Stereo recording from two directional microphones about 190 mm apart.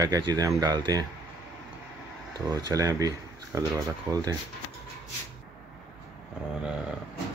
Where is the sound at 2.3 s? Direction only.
20° right (ahead or behind).